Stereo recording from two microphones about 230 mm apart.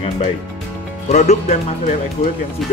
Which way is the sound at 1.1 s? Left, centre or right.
Left.